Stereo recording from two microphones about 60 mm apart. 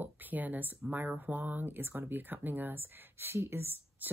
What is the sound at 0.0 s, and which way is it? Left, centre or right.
Speech, right.